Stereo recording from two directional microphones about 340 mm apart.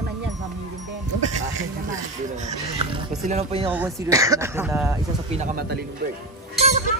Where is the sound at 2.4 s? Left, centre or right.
Right.